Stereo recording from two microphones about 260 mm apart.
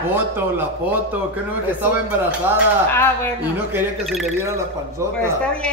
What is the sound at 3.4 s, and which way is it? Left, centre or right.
Speech, centre.